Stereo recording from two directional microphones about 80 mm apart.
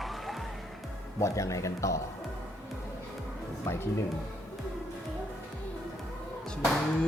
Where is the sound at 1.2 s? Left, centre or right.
Left.